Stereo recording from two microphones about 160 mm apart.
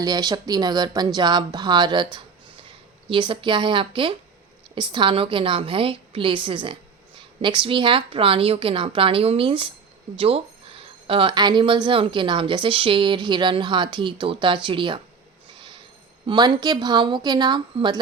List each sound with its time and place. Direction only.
0.0 s speech: 25° right (ahead or behind)
15.5 s train wheels squealing: 30° right (ahead or behind)
16.2 s speech: 30° right (ahead or behind)